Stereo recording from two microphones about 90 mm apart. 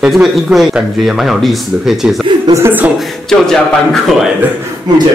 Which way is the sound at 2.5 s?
50° right (ahead or behind).